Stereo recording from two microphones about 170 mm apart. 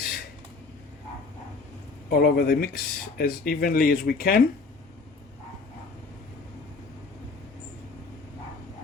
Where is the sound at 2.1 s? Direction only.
65° left (ahead or behind).